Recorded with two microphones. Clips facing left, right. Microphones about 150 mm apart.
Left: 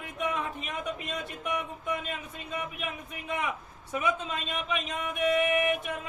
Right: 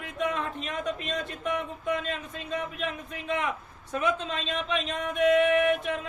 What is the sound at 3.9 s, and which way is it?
Speech, 10° left (ahead or behind).